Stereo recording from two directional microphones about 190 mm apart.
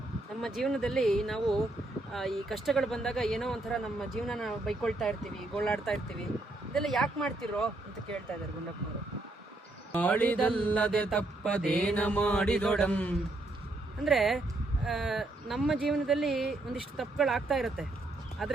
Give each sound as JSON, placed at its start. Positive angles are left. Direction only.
{"t": 0.4, "sound": "speech", "side_deg": 0}
{"t": 9.9, "sound": "music", "side_deg": 5}
{"t": 10.5, "sound": "mantra", "side_deg": -25}
{"t": 10.8, "sound": "speech", "side_deg": 5}